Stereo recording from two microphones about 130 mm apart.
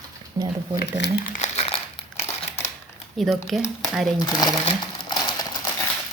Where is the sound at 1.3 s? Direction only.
60° left (ahead or behind).